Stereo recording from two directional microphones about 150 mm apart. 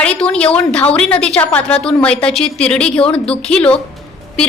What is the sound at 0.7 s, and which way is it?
A woman's voice, 10° left (ahead or behind).